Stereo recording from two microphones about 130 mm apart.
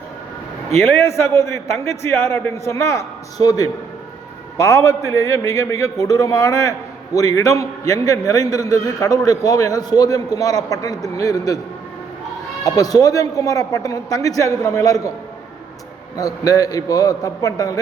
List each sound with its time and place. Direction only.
0.7 s a man's voice: 20° left (ahead or behind)
12.6 s a man's voice: 30° left (ahead or behind)
16.1 s a man's voice: 30° left (ahead or behind)